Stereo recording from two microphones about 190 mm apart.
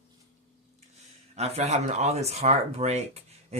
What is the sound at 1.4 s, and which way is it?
Speech, 35° right (ahead or behind).